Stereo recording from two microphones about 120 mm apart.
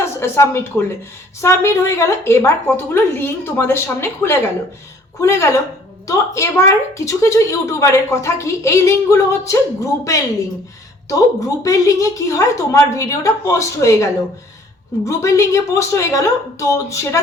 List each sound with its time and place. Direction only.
0.0 s a woman's voice: 20° left (ahead or behind)
11.1 s a woman's voice: 25° left (ahead or behind)